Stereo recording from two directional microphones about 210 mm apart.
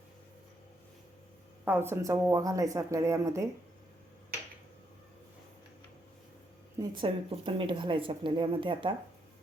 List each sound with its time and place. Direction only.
1.6 s speech: 10° right (ahead or behind)
6.7 s speech: 25° right (ahead or behind)